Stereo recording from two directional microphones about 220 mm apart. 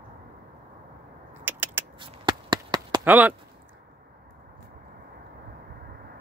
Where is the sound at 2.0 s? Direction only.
20° right (ahead or behind).